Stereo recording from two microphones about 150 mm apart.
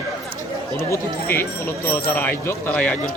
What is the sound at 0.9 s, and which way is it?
Speech, 15° left (ahead or behind).